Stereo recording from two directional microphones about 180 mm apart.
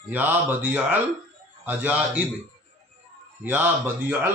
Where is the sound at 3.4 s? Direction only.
10° right (ahead or behind).